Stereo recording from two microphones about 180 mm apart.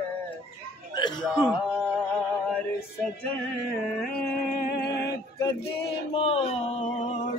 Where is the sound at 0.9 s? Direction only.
25° left (ahead or behind).